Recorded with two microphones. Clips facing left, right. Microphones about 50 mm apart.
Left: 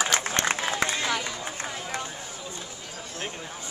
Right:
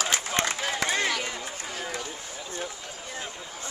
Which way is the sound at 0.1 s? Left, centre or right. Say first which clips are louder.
Left 2 dB; left.